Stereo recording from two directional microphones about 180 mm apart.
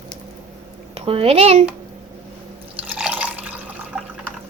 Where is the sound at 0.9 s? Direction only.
30° right (ahead or behind).